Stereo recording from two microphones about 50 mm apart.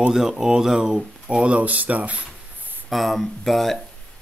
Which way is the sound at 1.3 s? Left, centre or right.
Centre.